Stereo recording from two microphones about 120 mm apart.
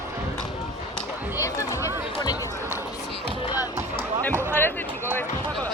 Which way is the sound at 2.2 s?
30° left (ahead or behind).